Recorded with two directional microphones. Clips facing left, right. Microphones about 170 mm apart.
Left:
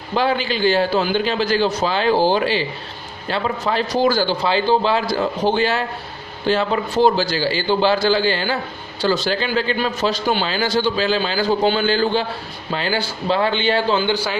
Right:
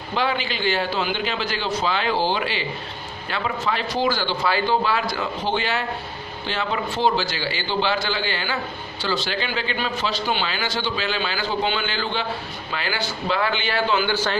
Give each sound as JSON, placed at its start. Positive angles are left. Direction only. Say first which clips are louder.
{"t": 0.2, "sound": "a man's voice", "louder": "left 5 dB", "side_deg": 35}
{"t": 4.5, "sound": "a man's voice", "louder": "left 3 dB", "side_deg": 25}
{"t": 14.1, "sound": "a man's voice", "louder": "left 1 dB", "side_deg": 10}